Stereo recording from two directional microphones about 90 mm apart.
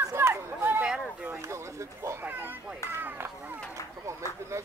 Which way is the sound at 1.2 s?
30° right (ahead or behind).